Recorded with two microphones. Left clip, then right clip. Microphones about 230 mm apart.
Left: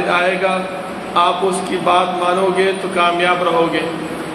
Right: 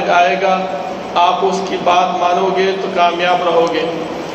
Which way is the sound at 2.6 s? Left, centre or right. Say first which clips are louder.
Right 2 dB; left.